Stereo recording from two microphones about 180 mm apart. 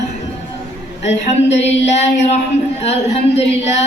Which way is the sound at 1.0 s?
40° left (ahead or behind).